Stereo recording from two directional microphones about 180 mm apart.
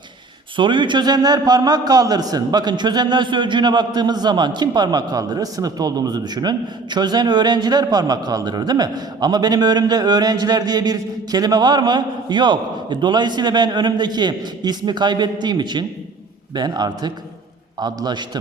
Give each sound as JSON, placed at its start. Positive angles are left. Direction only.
{"t": 0.5, "sound": "a man's voice", "side_deg": -25}